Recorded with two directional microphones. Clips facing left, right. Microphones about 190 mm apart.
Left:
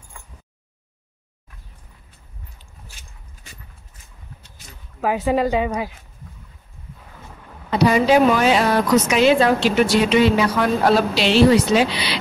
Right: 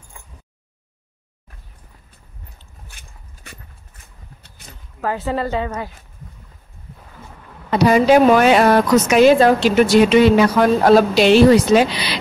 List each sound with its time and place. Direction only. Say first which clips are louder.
2.9 s a sound: right 1 dB; 60° right (ahead or behind)
5.0 s a woman's voice: left 3 dB; 15° left (ahead or behind)
7.8 s a woman's voice: right 3 dB; 50° right (ahead or behind)